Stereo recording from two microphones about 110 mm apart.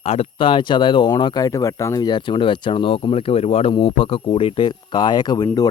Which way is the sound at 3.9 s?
55° left (ahead or behind).